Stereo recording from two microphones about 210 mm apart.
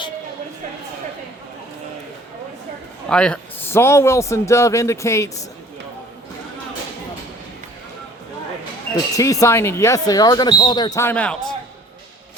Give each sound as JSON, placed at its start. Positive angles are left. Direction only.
{"t": 3.1, "sound": "speech", "side_deg": 5}
{"t": 9.1, "sound": "speech", "side_deg": 15}